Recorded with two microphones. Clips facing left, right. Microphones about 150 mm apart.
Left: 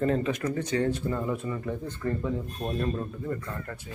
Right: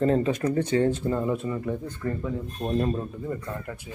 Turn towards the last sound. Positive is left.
turn(degrees=-15)  # may be behind; listen again after turning